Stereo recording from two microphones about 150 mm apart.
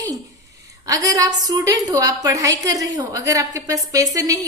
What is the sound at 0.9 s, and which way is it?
Speech, 25° right (ahead or behind).